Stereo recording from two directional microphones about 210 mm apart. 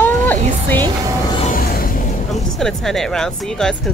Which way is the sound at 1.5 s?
45° left (ahead or behind).